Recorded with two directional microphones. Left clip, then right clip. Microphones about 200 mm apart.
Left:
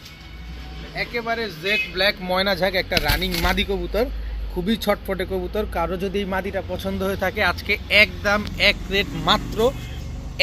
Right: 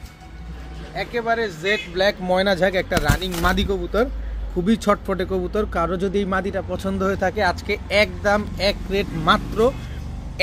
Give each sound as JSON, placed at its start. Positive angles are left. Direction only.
{"t": 0.9, "sound": "speech", "side_deg": -20}
{"t": 7.5, "sound": "speech", "side_deg": -20}